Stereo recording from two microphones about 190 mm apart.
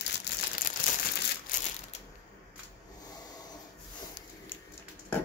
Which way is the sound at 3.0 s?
20° left (ahead or behind).